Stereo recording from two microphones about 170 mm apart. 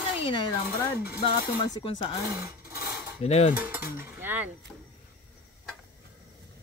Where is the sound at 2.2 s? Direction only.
20° right (ahead or behind).